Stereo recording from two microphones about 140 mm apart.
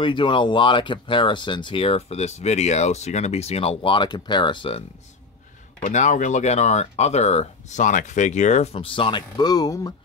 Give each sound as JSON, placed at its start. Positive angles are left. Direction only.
{"t": 0.0, "sound": "speech", "side_deg": 35}
{"t": 5.8, "sound": "speech", "side_deg": 60}
{"t": 8.7, "sound": "speech", "side_deg": 40}